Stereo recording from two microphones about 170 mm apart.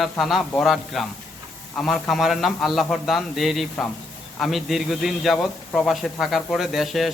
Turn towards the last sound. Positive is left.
turn(degrees=0)  # may be behind; listen again after turning